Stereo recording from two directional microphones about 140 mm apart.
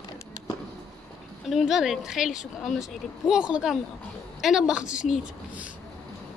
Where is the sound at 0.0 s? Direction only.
35° left (ahead or behind).